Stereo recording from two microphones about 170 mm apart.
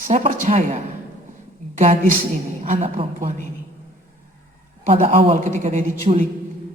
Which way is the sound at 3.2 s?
45° right (ahead or behind).